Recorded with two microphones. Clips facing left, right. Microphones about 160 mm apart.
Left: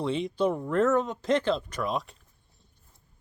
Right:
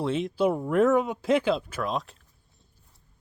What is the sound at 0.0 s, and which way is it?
Speech, centre (ahead or behind).